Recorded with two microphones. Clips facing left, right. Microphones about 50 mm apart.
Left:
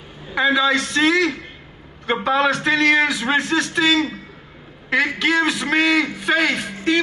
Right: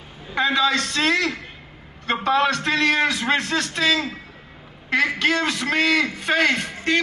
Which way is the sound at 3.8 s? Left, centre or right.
Left.